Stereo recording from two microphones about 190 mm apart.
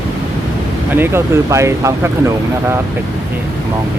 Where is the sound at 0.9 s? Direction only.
10° right (ahead or behind).